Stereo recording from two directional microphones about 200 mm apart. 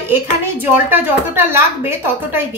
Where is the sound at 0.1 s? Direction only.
10° right (ahead or behind).